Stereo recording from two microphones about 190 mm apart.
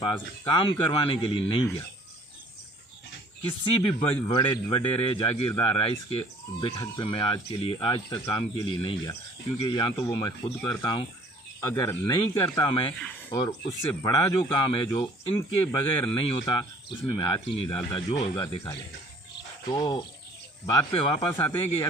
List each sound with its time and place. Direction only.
0.0 s speech: 25° left (ahead or behind)
3.6 s speech: 25° left (ahead or behind)
15.4 s speech: 15° left (ahead or behind)
21.2 s speech: 10° left (ahead or behind)